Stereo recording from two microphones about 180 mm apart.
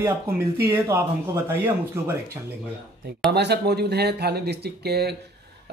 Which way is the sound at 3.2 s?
65° right (ahead or behind).